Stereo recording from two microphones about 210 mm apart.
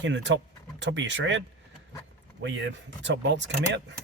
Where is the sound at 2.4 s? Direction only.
60° right (ahead or behind).